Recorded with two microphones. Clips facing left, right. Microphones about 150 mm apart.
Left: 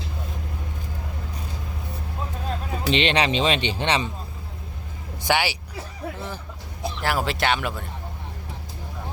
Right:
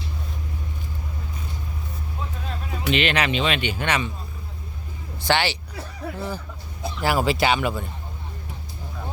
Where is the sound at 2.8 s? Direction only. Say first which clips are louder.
Left 1 dB; 30° left (ahead or behind).